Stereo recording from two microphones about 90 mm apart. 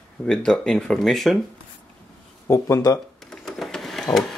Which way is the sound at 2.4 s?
35° left (ahead or behind).